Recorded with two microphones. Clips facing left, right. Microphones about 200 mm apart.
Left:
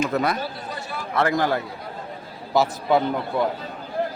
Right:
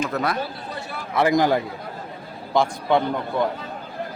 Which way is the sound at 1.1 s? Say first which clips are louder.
Right 3 dB; 15° right (ahead or behind).